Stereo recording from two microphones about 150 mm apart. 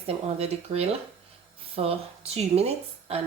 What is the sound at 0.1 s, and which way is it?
A woman's voice, 45° right (ahead or behind).